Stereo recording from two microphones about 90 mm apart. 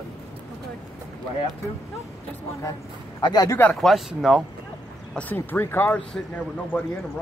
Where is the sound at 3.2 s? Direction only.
50° left (ahead or behind).